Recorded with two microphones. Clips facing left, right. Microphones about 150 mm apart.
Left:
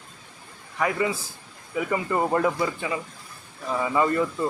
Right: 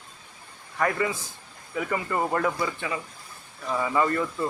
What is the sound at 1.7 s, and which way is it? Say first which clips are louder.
Speech: left 3 dB; 20° left (ahead or behind).